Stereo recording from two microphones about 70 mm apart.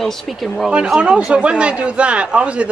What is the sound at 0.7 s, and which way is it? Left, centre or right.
Speech, centre.